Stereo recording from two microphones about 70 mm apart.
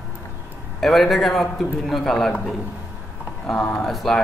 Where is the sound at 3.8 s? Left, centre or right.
Centre.